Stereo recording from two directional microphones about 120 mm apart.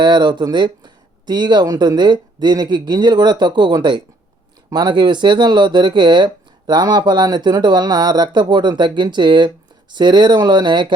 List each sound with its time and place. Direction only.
0.0 s speech: 40° right (ahead or behind)